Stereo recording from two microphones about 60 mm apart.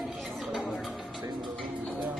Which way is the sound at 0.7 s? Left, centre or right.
Centre.